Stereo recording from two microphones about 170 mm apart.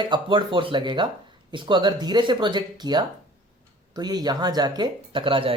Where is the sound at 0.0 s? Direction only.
30° right (ahead or behind).